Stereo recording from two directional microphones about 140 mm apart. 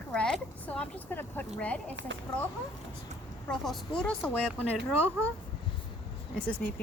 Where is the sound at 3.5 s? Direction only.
5° left (ahead or behind).